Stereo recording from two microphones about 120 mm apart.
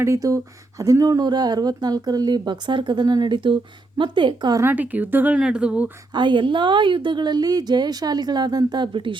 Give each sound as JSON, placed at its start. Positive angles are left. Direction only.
{"t": 0.0, "sound": "speech", "side_deg": -25}
{"t": 4.6, "sound": "speech", "side_deg": -15}
{"t": 6.1, "sound": "speech", "side_deg": -40}